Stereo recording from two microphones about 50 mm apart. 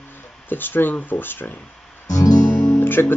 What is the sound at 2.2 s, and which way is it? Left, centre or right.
Guitar, left.